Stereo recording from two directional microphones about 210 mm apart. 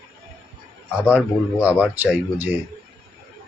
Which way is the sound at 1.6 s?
5° right (ahead or behind).